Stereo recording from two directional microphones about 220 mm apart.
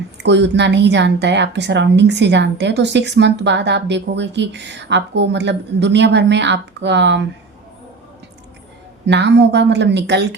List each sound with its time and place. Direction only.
0.2 s a woman's voice: 50° right (ahead or behind)
9.0 s a woman's voice: 50° right (ahead or behind)